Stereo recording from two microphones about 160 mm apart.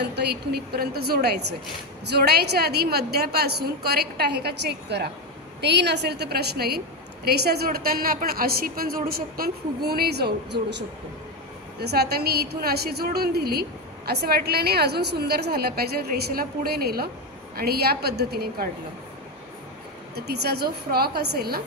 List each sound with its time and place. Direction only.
0.0 s a woman's voice: 90° right
11.8 s a woman's voice: 85° right
20.2 s a woman's voice: 85° right